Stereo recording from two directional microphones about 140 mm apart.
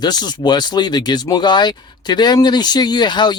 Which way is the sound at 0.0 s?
30° left (ahead or behind).